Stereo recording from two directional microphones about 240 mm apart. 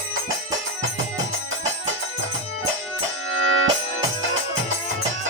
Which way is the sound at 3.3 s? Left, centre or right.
Right.